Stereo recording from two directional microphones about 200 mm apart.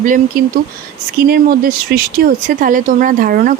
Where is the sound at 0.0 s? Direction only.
45° right (ahead or behind).